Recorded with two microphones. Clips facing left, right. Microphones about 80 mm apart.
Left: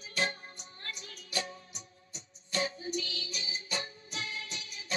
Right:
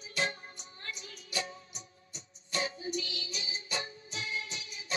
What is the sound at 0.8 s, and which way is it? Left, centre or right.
Music, left.